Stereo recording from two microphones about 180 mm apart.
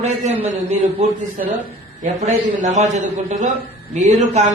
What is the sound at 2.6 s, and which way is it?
A man's voice, 40° right (ahead or behind).